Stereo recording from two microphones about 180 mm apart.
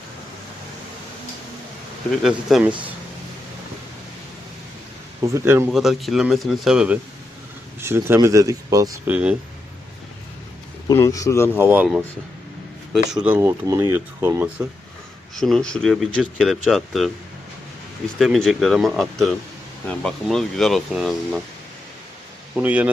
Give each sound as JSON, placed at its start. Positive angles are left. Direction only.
{"t": 2.2, "sound": "speech", "side_deg": -5}
{"t": 5.2, "sound": "speech", "side_deg": -15}
{"t": 5.7, "sound": "speech", "side_deg": 0}
{"t": 10.8, "sound": "speech", "side_deg": 15}
{"t": 11.5, "sound": "speech", "side_deg": -10}
{"t": 12.9, "sound": "speech", "side_deg": -5}
{"t": 15.4, "sound": "speech", "side_deg": 0}
{"t": 18.2, "sound": "speech", "side_deg": 0}
{"t": 22.5, "sound": "speech", "side_deg": -10}